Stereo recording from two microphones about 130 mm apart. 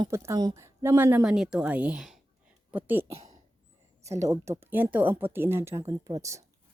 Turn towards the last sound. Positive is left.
turn(degrees=-25)  # may be behind; listen again after turning